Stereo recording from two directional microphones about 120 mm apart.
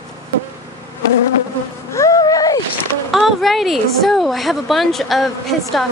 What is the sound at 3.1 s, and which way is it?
A woman's voice, centre (ahead or behind).